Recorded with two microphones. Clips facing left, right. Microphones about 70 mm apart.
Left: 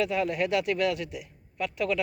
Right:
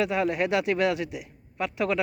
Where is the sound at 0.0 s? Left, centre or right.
Centre.